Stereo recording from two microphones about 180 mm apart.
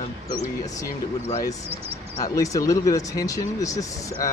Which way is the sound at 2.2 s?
20° left (ahead or behind).